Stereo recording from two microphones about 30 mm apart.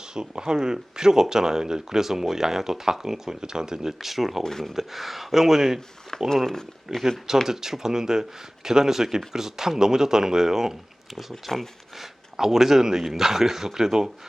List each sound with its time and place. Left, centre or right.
0.1 s speech: right
4.0 s speech: centre
4.4 s speech: centre
4.7 s speech: centre
6.2 s speech: centre
6.9 s speech: centre